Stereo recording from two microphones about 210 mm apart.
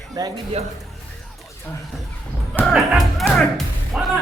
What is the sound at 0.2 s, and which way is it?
Speech, 20° right (ahead or behind).